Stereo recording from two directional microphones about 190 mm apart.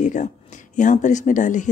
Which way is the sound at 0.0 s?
40° left (ahead or behind).